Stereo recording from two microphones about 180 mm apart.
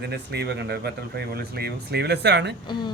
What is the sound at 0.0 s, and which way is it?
Speech, 65° right (ahead or behind).